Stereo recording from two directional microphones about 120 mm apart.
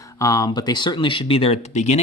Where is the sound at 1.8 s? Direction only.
75° left (ahead or behind).